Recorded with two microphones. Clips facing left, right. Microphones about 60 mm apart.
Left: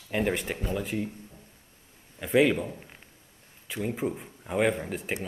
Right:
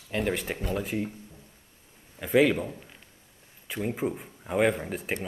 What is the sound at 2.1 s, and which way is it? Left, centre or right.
Speech, centre.